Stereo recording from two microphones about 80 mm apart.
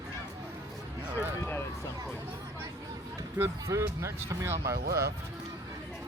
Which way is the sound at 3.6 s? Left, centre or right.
Right.